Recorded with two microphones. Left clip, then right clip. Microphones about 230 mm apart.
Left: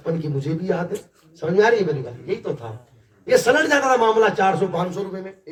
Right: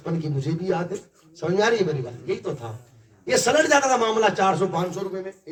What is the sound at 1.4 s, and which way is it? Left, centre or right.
Speech, centre.